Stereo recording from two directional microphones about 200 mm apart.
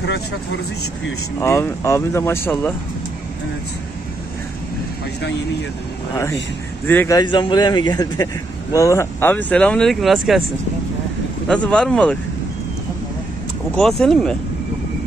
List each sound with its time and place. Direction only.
1.4 s speech: 15° left (ahead or behind)
6.9 s speech: 10° left (ahead or behind)
7.2 s a man's voice: 25° left (ahead or behind); by 10.4 s centre (ahead or behind)
11.4 s speech: 5° left (ahead or behind)
13.7 s speech: centre (ahead or behind)